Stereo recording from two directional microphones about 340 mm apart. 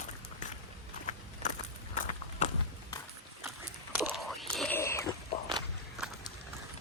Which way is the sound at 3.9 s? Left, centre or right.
Centre.